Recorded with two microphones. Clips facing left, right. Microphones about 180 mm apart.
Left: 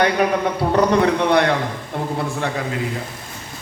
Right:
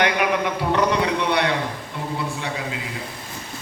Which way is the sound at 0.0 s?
35° left (ahead or behind).